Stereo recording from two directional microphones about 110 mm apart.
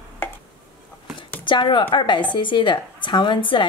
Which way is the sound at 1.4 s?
45° left (ahead or behind).